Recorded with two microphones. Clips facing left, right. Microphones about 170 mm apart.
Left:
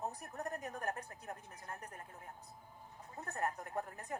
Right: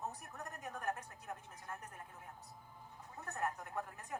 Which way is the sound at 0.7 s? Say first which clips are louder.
Even; 40° left (ahead or behind).